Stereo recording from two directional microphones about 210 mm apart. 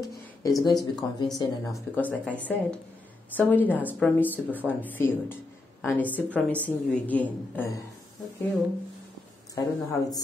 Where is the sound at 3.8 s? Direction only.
10° right (ahead or behind).